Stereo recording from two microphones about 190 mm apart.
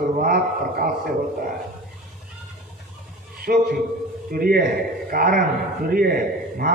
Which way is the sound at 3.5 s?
50° right (ahead or behind).